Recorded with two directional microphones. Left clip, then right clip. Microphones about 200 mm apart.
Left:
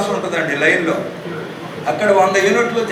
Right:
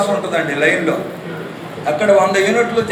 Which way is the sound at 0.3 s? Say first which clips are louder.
Even; 50° right (ahead or behind).